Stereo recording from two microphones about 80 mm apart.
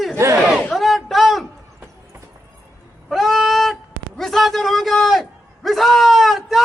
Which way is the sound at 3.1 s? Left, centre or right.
Centre.